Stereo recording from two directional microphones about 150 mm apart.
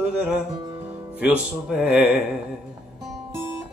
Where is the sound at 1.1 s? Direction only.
10° right (ahead or behind).